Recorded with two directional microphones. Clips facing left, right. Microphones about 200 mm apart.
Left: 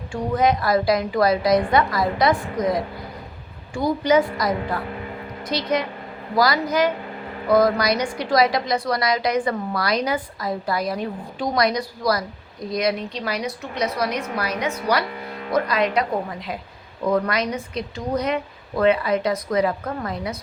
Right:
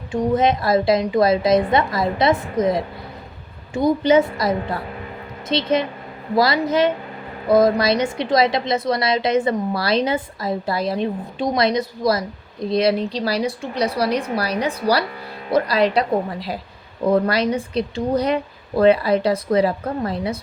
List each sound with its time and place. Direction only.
0.1 s a woman's voice: 25° right (ahead or behind)